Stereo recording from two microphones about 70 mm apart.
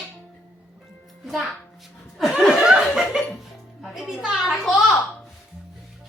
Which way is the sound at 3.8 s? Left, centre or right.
Centre.